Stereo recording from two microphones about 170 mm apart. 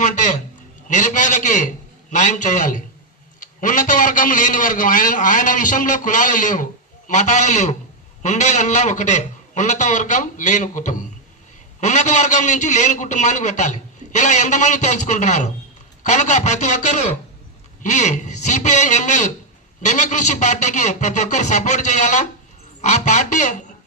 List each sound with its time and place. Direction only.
0.0 s a man's voice: 45° left (ahead or behind)